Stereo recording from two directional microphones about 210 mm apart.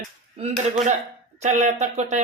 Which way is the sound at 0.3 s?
30° right (ahead or behind).